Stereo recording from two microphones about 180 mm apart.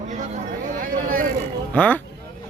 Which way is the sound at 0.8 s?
50° right (ahead or behind).